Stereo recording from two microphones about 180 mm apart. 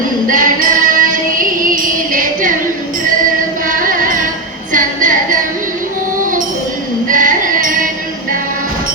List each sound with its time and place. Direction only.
0.3 s music: 50° right (ahead or behind)
3.7 s music: 50° right (ahead or behind)
7.1 s music: 50° right (ahead or behind)